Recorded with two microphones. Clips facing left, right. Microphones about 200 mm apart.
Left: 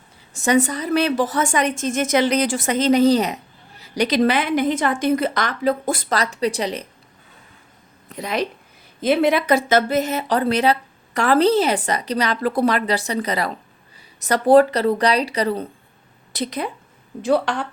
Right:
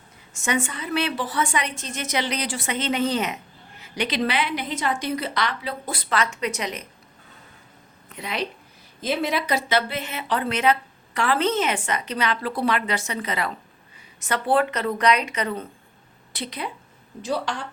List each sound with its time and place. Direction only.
0.3 s a woman's voice: 35° left (ahead or behind)
8.1 s speech: 40° left (ahead or behind)
9.0 s a woman's voice: 60° left (ahead or behind)
17.2 s speech: 60° left (ahead or behind)